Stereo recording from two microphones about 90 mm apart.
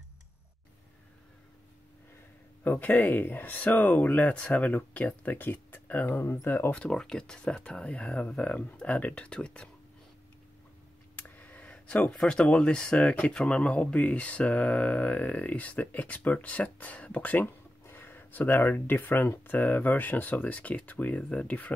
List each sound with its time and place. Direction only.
2.6 s speech: 20° left (ahead or behind)
6.0 s speech: 30° left (ahead or behind)
6.7 s speech: 10° left (ahead or behind)
11.1 s a sound: 20° left (ahead or behind)
12.2 s speech: 10° left (ahead or behind)